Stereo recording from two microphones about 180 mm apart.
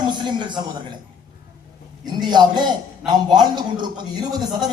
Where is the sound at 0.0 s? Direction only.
25° right (ahead or behind).